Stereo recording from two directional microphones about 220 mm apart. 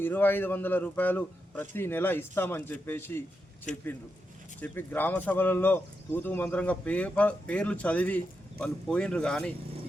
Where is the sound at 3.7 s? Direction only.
35° left (ahead or behind).